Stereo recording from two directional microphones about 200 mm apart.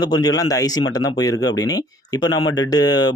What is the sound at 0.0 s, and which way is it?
Speech, 20° left (ahead or behind).